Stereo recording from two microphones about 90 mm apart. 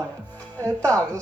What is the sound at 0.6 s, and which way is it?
Speech, 10° left (ahead or behind).